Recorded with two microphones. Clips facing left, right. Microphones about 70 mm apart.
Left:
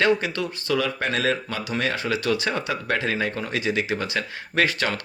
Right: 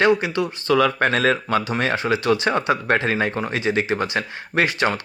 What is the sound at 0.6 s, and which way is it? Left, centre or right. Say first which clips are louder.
Speech: right 7 dB; right.